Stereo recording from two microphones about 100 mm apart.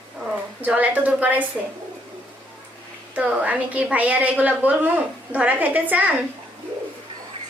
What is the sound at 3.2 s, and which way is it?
A woman's voice, 15° right (ahead or behind).